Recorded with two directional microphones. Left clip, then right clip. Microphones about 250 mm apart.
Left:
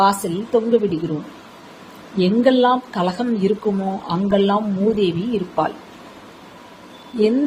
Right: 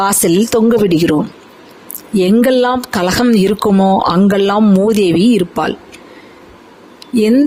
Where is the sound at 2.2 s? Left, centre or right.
Right.